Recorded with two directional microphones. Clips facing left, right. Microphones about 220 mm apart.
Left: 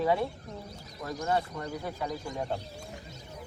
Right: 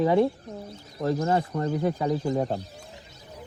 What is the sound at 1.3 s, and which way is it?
Speech, 35° right (ahead or behind).